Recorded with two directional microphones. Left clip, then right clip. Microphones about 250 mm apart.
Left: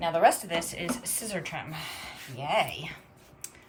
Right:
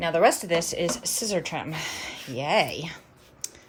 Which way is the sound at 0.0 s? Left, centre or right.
Right.